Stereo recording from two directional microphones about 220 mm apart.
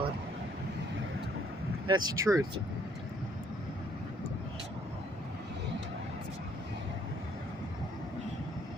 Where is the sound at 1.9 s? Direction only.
15° right (ahead or behind).